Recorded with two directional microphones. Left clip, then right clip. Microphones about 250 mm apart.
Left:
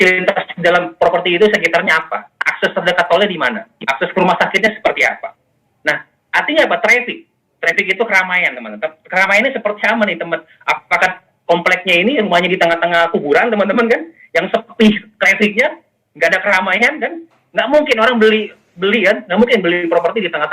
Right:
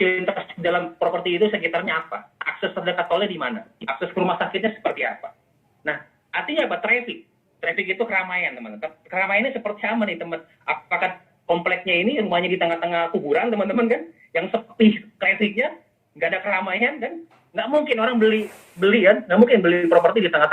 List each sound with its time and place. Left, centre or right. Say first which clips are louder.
0.0 s a man's voice: left 9 dB; left
18.8 s a man's voice: left 3 dB; centre